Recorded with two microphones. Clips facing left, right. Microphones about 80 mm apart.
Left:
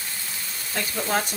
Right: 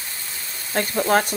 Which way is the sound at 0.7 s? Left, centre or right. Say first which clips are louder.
Right 7 dB; right.